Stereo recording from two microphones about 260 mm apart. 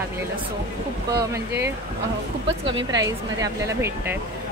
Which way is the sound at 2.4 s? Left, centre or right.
Right.